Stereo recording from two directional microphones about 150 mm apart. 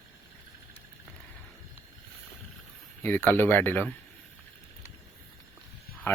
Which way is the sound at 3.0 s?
15° left (ahead or behind).